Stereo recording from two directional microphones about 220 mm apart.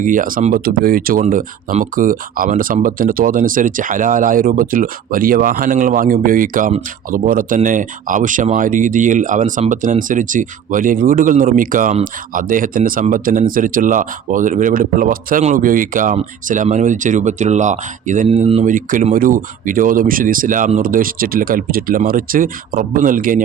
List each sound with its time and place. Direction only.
0.0 s speech: 40° right (ahead or behind)